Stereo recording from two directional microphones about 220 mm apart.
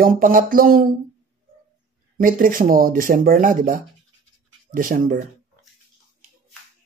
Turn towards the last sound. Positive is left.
turn(degrees=-40)  # may be behind; listen again after turning